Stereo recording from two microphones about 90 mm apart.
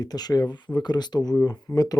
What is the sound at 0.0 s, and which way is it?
Speech, 45° left (ahead or behind).